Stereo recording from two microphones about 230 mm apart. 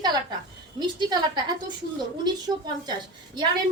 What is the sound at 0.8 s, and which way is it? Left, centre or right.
Speech, centre.